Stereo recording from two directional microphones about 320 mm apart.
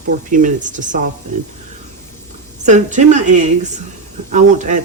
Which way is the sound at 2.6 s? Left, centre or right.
Right.